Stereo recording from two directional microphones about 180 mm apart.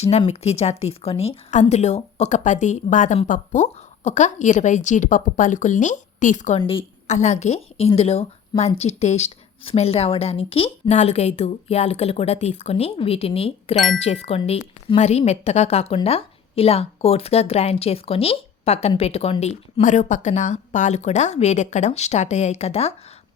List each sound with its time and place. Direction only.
0.0 s a woman's voice: 35° left (ahead or behind)
6.6 s a woman's voice: 30° left (ahead or behind)
7.1 s a woman's voice: 40° left (ahead or behind)